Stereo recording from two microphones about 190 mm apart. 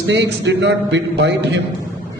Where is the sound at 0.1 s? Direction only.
65° right (ahead or behind).